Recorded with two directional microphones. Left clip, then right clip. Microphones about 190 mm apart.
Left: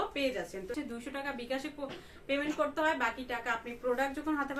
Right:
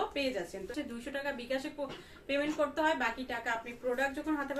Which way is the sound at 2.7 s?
20° left (ahead or behind).